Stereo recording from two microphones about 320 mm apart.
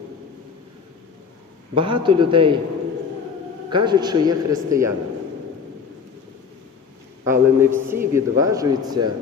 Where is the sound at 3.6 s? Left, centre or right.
Centre.